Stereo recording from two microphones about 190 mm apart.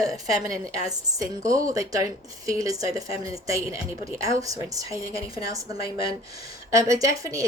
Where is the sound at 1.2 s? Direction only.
15° right (ahead or behind).